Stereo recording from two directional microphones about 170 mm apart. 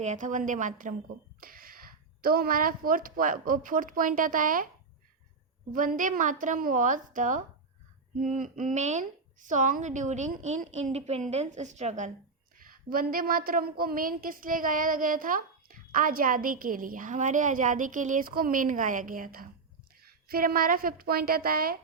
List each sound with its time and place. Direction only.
0.0 s a woman's voice: 45° right (ahead or behind)
1.4 s speech: 60° right (ahead or behind)
5.7 s a woman's voice: 50° right (ahead or behind)
12.5 s a woman's voice: 55° right (ahead or behind)